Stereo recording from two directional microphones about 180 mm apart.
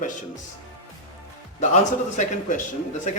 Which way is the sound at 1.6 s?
45° left (ahead or behind).